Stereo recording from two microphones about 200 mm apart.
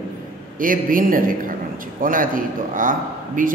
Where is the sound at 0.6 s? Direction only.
45° right (ahead or behind).